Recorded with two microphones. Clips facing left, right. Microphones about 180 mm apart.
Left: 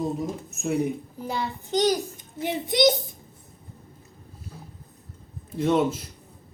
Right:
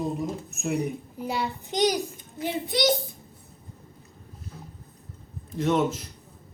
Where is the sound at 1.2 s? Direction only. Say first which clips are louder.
Right 3 dB; 10° right (ahead or behind).